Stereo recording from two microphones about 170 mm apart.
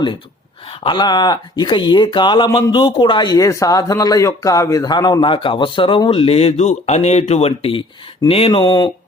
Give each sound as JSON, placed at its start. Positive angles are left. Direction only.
{"t": 0.9, "sound": "speech", "side_deg": 25}